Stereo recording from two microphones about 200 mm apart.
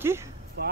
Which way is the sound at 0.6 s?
55° right (ahead or behind).